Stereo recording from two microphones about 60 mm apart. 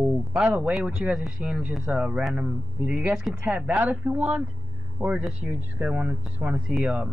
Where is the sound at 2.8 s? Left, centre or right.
Right.